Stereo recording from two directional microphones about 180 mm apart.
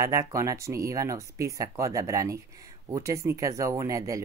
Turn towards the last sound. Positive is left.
turn(degrees=-20)  # may be behind; listen again after turning